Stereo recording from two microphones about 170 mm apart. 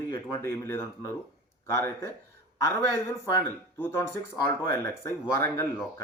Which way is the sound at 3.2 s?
15° left (ahead or behind).